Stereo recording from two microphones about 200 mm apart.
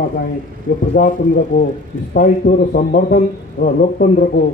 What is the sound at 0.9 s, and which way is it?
A man's voice, 40° left (ahead or behind).